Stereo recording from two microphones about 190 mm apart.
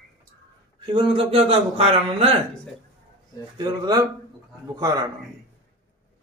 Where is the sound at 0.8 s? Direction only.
25° right (ahead or behind).